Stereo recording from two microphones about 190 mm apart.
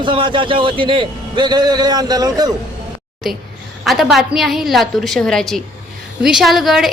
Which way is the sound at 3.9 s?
Centre (ahead or behind).